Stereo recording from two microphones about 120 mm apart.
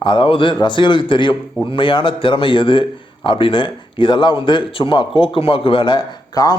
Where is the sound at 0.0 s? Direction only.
45° left (ahead or behind).